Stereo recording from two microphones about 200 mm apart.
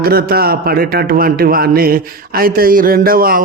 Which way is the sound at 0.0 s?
50° right (ahead or behind).